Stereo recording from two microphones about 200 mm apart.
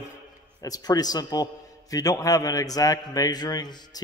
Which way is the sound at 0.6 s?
20° left (ahead or behind).